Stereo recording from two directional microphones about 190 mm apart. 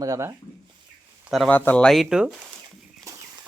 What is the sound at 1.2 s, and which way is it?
Speech, centre (ahead or behind).